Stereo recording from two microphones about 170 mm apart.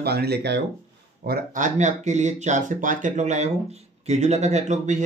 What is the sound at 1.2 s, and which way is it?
Speech, 55° right (ahead or behind).